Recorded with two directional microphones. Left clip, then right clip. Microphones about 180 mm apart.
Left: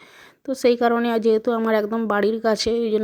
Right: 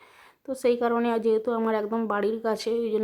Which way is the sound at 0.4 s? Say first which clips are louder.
Left 6 dB; 25° left (ahead or behind).